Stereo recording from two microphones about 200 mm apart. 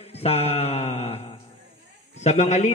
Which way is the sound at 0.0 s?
30° left (ahead or behind).